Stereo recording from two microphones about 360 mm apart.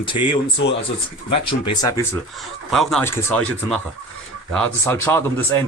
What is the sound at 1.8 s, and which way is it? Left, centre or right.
Speech, centre.